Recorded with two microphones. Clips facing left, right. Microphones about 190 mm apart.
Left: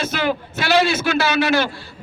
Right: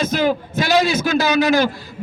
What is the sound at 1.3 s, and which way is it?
Speech, 40° right (ahead or behind).